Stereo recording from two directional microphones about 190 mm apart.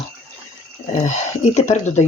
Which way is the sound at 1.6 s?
35° left (ahead or behind).